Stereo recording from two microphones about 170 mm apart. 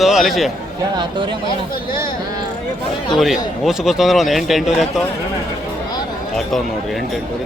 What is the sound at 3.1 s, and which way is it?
Speech, centre (ahead or behind).